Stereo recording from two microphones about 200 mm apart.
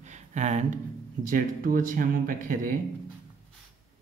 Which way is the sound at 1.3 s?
45° right (ahead or behind).